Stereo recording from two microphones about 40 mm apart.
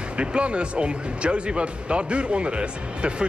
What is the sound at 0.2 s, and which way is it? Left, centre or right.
Speech, right.